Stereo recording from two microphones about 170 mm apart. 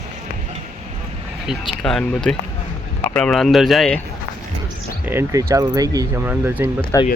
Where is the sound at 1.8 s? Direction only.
5° left (ahead or behind).